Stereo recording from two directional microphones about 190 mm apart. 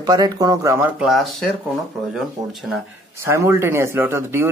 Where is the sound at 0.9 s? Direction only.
Centre (ahead or behind).